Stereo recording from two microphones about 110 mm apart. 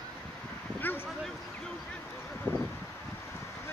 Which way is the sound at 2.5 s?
20° left (ahead or behind).